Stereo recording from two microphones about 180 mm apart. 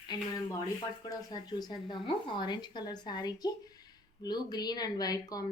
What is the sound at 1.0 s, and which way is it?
Speech, 20° left (ahead or behind).